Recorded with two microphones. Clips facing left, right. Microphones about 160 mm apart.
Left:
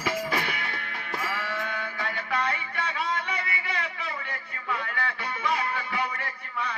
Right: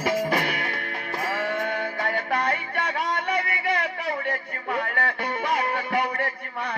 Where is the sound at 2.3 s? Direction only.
55° right (ahead or behind).